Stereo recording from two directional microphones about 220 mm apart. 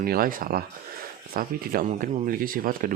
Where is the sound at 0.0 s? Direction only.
40° right (ahead or behind).